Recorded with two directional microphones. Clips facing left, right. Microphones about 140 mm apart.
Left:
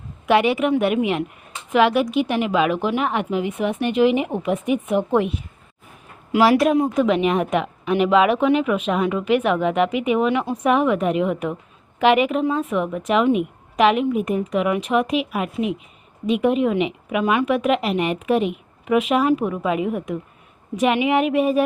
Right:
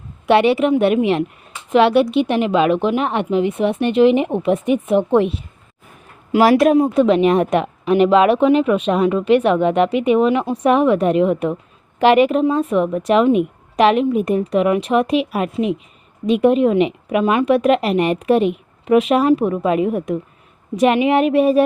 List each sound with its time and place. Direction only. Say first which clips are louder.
0.3 s a woman's voice: right 4 dB; 30° right (ahead or behind)
3.8 s speech: right 4 dB; 10° left (ahead or behind)
4.2 s a woman's voice: right 5 dB; 30° right (ahead or behind)
6.4 s speech: right 3 dB; 45° right (ahead or behind)
6.7 s a woman's voice: right 5 dB; 30° right (ahead or behind)
16.2 s speech: right 5 dB; 35° right (ahead or behind)